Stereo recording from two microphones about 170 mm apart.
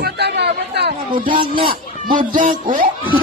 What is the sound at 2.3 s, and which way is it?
Speech, 50° right (ahead or behind).